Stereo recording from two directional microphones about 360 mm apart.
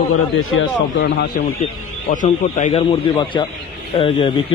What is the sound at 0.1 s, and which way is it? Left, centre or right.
A man's voice, left.